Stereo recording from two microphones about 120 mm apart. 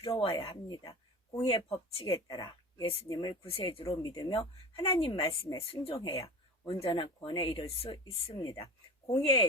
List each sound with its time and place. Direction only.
0.2 s speech: 45° left (ahead or behind)
2.4 s speech: 40° left (ahead or behind)
3.4 s speech: 50° left (ahead or behind)